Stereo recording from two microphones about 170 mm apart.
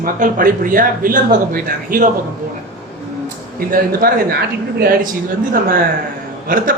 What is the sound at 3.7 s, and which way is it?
Speech, 65° right (ahead or behind).